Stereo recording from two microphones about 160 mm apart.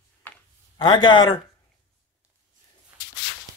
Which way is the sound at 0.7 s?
25° left (ahead or behind).